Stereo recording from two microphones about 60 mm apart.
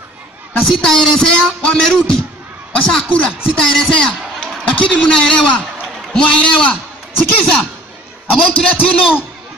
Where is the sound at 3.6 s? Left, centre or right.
Centre.